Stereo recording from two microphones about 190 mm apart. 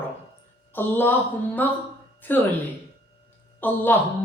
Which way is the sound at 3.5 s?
10° left (ahead or behind).